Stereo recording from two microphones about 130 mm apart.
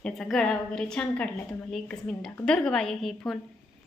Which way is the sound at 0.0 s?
5° left (ahead or behind).